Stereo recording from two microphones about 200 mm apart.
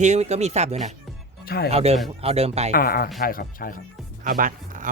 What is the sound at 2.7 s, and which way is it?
Speech, 45° left (ahead or behind).